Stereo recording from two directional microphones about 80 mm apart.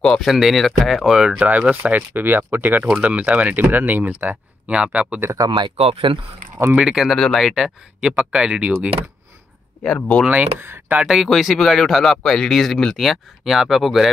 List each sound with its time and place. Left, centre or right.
0.0 s speech: centre
0.3 s speech: centre
5.2 s speech: right
5.5 s speech: right
6.7 s speech: centre
9.8 s speech: centre
10.2 s speech: right
11.0 s speech: centre